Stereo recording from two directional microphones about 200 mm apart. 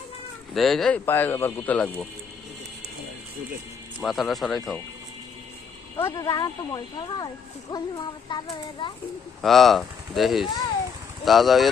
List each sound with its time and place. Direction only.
0.5 s speech: centre (ahead or behind)
4.0 s speech: centre (ahead or behind)
6.0 s speech: 15° left (ahead or behind)
9.4 s speech: centre (ahead or behind)